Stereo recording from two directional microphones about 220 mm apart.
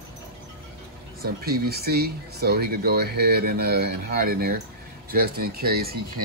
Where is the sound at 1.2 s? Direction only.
45° right (ahead or behind).